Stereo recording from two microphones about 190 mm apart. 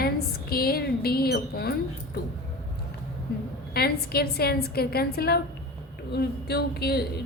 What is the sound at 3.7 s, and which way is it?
A woman's voice, 55° left (ahead or behind).